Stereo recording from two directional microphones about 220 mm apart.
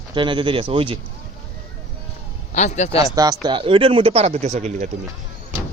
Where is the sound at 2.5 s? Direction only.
30° left (ahead or behind).